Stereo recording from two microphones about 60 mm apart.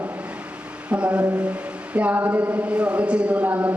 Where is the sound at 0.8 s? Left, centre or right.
Centre.